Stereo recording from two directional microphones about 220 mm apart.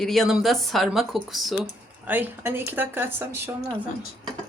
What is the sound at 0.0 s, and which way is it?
Speech, centre (ahead or behind).